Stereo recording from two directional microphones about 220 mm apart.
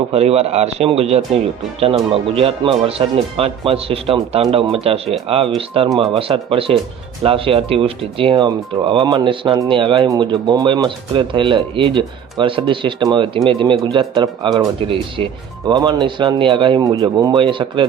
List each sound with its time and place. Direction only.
0.1 s speech: 30° right (ahead or behind)